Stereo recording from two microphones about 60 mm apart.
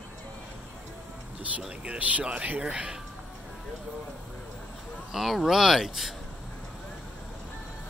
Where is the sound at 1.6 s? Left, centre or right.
Centre.